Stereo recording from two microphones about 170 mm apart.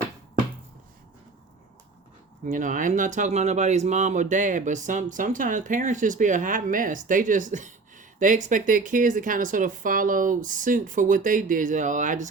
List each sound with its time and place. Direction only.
2.4 s speech: 50° right (ahead or behind)